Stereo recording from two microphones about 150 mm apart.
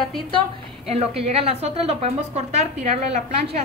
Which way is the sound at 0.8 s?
45° right (ahead or behind).